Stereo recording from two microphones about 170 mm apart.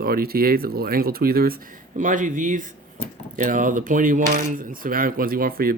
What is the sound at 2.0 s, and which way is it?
Speech, 50° right (ahead or behind).